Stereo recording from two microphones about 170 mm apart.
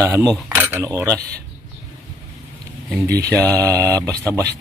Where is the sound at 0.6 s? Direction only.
15° right (ahead or behind).